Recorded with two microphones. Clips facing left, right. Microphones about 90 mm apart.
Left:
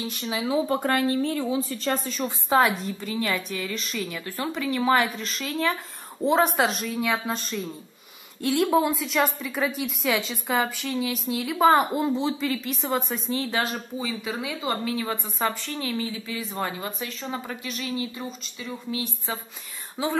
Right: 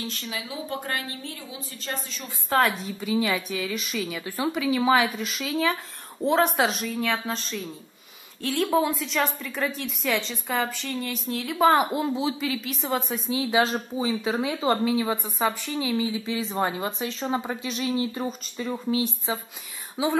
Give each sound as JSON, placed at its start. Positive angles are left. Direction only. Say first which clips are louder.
{"t": 0.0, "sound": "speech", "louder": "left 3 dB", "side_deg": 15}
{"t": 0.4, "sound": "speech", "louder": "left 11 dB", "side_deg": 35}
{"t": 0.8, "sound": "a woman's voice", "louder": "left 10 dB", "side_deg": 50}
{"t": 2.5, "sound": "a woman's voice", "louder": "left 1 dB", "side_deg": 0}
{"t": 13.6, "sound": "a woman's voice", "louder": "right 4 dB", "side_deg": -20}
{"t": 15.0, "sound": "a woman's voice", "louder": "right 3 dB", "side_deg": -15}
{"t": 18.1, "sound": "speech", "louder": "right 5 dB", "side_deg": -45}
{"t": 18.9, "sound": "a woman's voice", "louder": "right 4 dB", "side_deg": -20}